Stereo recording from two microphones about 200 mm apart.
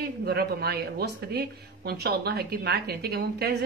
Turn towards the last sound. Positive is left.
turn(degrees=-50)  # may be behind; listen again after turning